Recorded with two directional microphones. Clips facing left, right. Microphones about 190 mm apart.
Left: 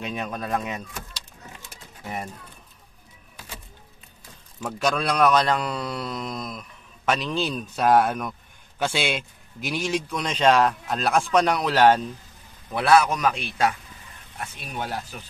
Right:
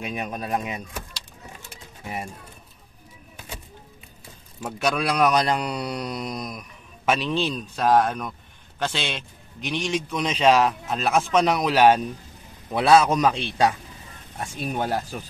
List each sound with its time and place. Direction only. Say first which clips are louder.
0.0 s a man's voice: even; 10° right (ahead or behind)
2.0 s a man's voice: even; 10° right (ahead or behind)
4.6 s a man's voice: even; 10° right (ahead or behind)
7.1 s a man's voice: right 1 dB; 5° right (ahead or behind)
12.7 s a man's voice: right 2 dB; 20° right (ahead or behind)
14.5 s speech: right 6 dB; 45° right (ahead or behind)